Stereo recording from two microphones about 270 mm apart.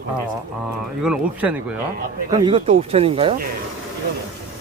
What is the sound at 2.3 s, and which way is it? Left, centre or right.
Speech, centre.